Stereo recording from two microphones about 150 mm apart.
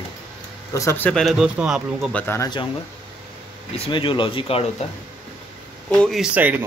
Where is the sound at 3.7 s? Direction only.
40° left (ahead or behind).